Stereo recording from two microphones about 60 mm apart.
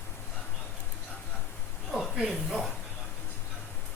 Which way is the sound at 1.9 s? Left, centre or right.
Centre.